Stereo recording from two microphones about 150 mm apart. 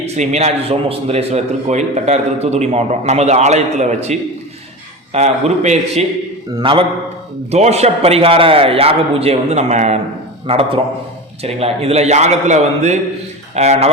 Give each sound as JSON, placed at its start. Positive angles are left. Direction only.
{"t": 0.0, "sound": "a man's voice", "side_deg": -50}
{"t": 6.6, "sound": "speech", "side_deg": -35}
{"t": 7.5, "sound": "a man's voice", "side_deg": -45}
{"t": 10.4, "sound": "a man's voice", "side_deg": -40}